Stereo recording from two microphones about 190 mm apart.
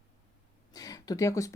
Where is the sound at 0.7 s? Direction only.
20° left (ahead or behind).